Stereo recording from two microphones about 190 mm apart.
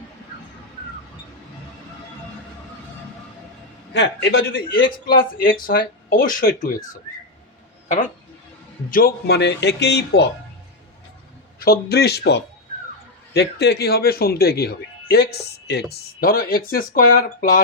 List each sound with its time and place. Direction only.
3.9 s speech: 65° left (ahead or behind)
11.6 s speech: 55° left (ahead or behind)